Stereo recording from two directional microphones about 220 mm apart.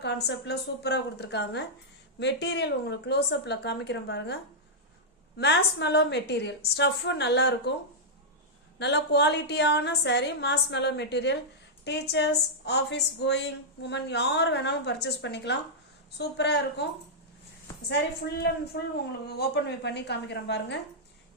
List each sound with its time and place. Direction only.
0.3 s a woman's voice: 50° left (ahead or behind)
5.4 s a woman's voice: 50° left (ahead or behind)
8.8 s a woman's voice: 50° left (ahead or behind)
18.3 s a woman's voice: 45° left (ahead or behind)